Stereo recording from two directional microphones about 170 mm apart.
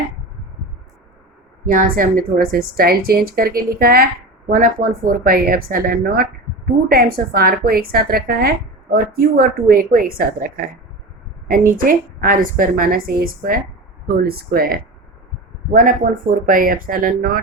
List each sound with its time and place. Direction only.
1.6 s a woman's voice: 55° right (ahead or behind)